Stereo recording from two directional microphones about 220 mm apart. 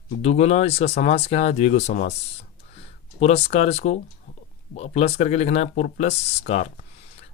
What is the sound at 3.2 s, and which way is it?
Speech, 30° left (ahead or behind).